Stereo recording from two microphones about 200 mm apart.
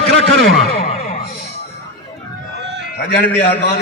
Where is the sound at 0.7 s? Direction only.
30° left (ahead or behind).